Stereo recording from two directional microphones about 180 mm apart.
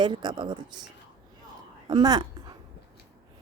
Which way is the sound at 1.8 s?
20° right (ahead or behind).